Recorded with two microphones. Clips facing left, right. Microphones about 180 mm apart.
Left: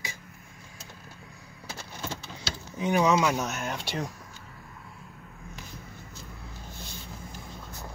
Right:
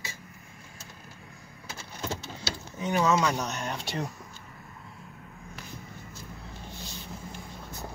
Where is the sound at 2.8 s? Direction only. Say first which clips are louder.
Left 2 dB; 15° left (ahead or behind).